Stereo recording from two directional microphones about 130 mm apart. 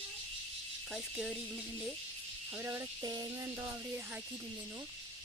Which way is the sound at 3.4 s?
20° right (ahead or behind).